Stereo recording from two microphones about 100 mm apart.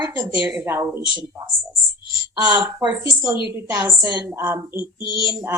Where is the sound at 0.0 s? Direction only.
15° right (ahead or behind).